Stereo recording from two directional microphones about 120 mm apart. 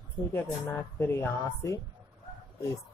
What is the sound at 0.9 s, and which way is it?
Mantra, 20° left (ahead or behind).